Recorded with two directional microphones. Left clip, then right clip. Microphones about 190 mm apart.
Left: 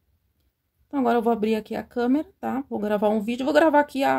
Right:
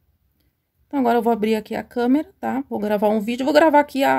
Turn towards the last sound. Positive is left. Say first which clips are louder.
# right 4 dB
turn(degrees=0)  # may be behind; listen again after turning